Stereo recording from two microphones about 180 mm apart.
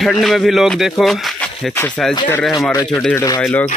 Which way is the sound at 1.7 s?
10° left (ahead or behind).